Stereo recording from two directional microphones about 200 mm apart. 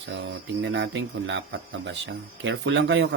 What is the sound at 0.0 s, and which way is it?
A man's voice, 65° right (ahead or behind).